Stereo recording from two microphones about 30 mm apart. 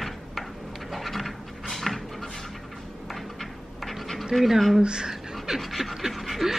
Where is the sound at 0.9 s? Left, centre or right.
Centre.